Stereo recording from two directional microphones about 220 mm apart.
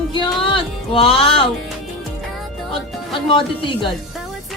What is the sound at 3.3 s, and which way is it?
Speech, 20° left (ahead or behind).